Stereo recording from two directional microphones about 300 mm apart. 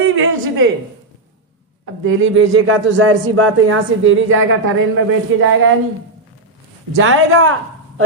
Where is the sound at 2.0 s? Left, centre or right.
Right.